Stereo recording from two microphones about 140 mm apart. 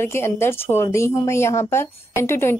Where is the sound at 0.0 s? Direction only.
20° left (ahead or behind).